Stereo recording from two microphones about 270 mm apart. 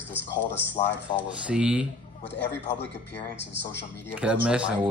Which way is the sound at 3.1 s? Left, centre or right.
Left.